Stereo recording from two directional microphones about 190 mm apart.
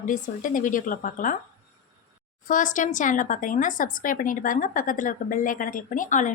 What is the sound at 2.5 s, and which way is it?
A woman's voice, 45° left (ahead or behind).